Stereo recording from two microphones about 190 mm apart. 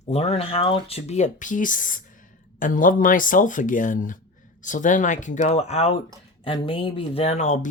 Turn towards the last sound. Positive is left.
turn(degrees=35)  # may be behind; listen again after turning